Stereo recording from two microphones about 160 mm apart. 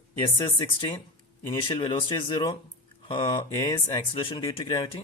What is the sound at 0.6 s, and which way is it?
Speech, 30° left (ahead or behind).